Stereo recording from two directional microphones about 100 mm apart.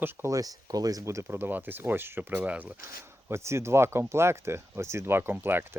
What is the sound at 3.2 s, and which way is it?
Speech, 25° right (ahead or behind).